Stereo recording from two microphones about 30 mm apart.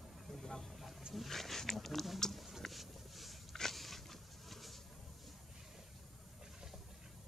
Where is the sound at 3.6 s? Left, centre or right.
Centre.